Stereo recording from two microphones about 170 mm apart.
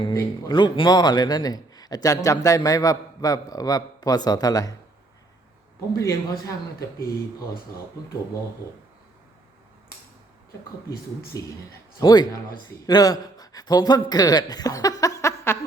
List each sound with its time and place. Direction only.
0.1 s a man's voice: 20° left (ahead or behind)
6.0 s a man's voice: 15° left (ahead or behind)
11.3 s a man's voice: 20° left (ahead or behind)